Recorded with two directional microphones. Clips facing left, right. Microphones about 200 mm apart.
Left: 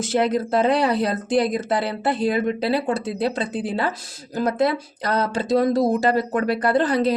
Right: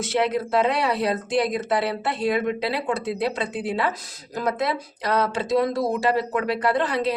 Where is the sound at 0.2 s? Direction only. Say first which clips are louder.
Left 2 dB; 35° left (ahead or behind).